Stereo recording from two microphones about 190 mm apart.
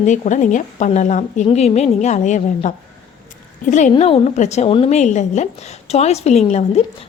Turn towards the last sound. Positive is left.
turn(degrees=35)  # may be behind; listen again after turning